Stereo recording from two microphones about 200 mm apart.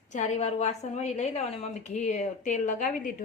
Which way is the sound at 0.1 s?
35° left (ahead or behind).